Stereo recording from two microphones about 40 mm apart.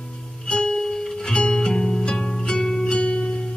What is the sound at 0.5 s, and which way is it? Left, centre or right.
Music, centre.